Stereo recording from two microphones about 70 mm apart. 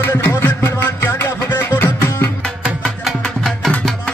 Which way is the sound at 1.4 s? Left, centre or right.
Left.